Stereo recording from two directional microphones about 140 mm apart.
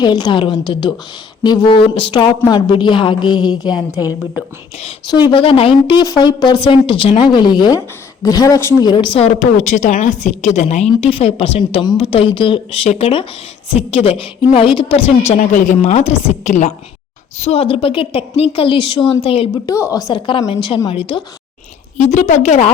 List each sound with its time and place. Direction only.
0.0 s a woman's voice: 30° left (ahead or behind)
4.0 s a woman's voice: 5° right (ahead or behind)
5.3 s a woman's voice: 40° left (ahead or behind)
6.0 s a woman's voice: 30° left (ahead or behind)
8.9 s a woman's voice: 35° left (ahead or behind)
9.2 s a woman's voice: 60° left (ahead or behind); by 15.1 s 40° left (ahead or behind)
15.4 s a woman's voice: 65° left (ahead or behind); by 19.5 s 40° left (ahead or behind)
19.6 s a woman's voice: 25° left (ahead or behind); by 21.2 s 40° left (ahead or behind)
21.9 s a woman's voice: 60° left (ahead or behind)